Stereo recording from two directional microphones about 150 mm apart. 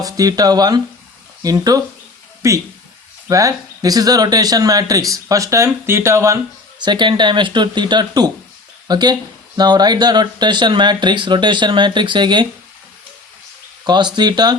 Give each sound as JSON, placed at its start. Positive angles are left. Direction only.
{"t": 0.0, "sound": "speech", "side_deg": -25}
{"t": 13.8, "sound": "speech", "side_deg": -30}